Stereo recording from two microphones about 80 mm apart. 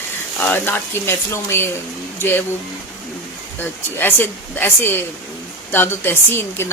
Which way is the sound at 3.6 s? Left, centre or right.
Left.